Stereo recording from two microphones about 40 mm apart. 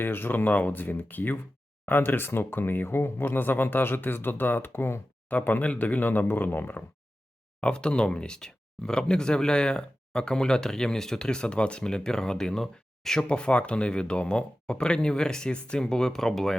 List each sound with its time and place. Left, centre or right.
0.0 s speech: left
5.3 s speech: left
7.6 s speech: left
8.4 s speech: centre
13.2 s speech: left; by 16.6 s centre